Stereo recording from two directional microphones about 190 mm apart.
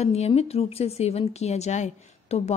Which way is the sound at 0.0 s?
35° left (ahead or behind).